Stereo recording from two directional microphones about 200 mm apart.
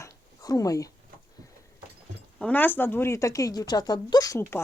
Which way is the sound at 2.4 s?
10° left (ahead or behind).